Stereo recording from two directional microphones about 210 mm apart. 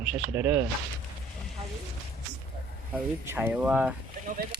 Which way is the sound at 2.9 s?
10° right (ahead or behind).